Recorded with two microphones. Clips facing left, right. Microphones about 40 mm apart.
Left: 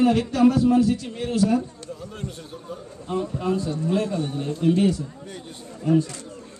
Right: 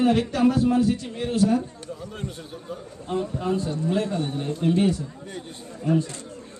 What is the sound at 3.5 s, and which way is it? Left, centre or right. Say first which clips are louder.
A man's voice: left 1 dB; right.